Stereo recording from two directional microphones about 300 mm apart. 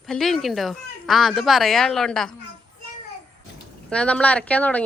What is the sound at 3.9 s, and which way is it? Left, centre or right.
Speech, centre.